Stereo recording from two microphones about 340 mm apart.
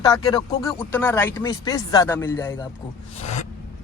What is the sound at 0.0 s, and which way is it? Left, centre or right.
Speech, centre.